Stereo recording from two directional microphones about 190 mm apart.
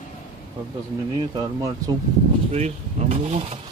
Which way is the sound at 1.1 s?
20° right (ahead or behind).